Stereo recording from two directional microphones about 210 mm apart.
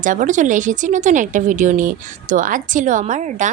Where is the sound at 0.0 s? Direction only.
40° right (ahead or behind).